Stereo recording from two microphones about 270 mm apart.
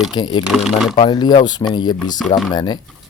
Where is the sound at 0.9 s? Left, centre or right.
Centre.